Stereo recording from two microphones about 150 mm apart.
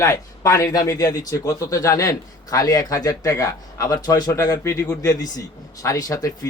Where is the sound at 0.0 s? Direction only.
25° left (ahead or behind).